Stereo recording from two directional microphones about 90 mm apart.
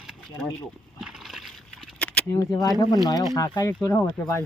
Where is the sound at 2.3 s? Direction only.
40° left (ahead or behind).